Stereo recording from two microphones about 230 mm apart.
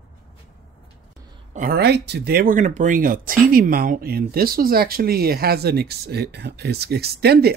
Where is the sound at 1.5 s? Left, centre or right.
Right.